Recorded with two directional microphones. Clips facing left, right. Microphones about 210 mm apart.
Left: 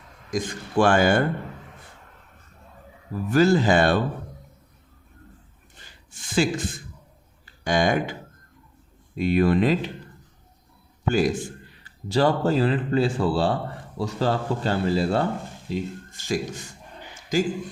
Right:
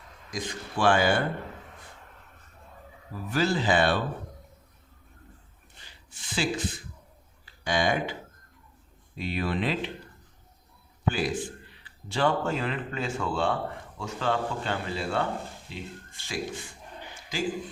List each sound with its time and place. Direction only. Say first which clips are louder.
0.3 s speech: left 7 dB; 50° left (ahead or behind)
3.2 s speech: left 7 dB; 45° left (ahead or behind)
6.1 s speech: left 7 dB; 45° left (ahead or behind)
9.1 s speech: left 10 dB; 50° left (ahead or behind)
11.1 s a man's voice: left 7 dB; 45° left (ahead or behind)